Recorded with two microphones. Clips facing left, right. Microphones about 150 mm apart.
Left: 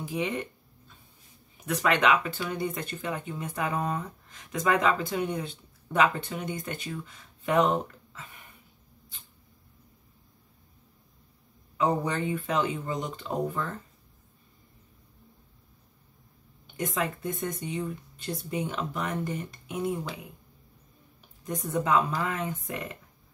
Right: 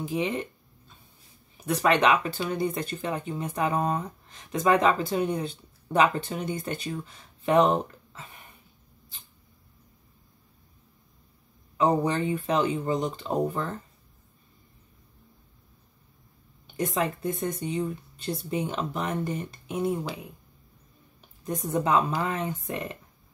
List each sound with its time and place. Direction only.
0.0 s a sound: 25° right (ahead or behind)
1.7 s speech: 35° right (ahead or behind)
11.7 s speech: 30° right (ahead or behind)
16.7 s speech: 30° right (ahead or behind)
21.5 s speech: 25° right (ahead or behind)